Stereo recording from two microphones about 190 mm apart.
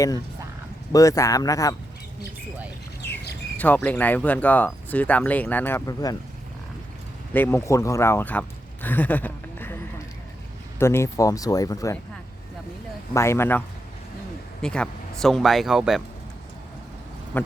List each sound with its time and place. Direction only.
0.9 s speech: 20° left (ahead or behind)
3.6 s speech: 10° left (ahead or behind)
7.3 s speech: 10° left (ahead or behind)
13.1 s speech: 15° left (ahead or behind); by 16.0 s centre (ahead or behind)
17.3 s speech: 10° left (ahead or behind)